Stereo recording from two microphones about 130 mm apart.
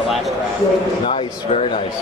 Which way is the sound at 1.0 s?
50° left (ahead or behind).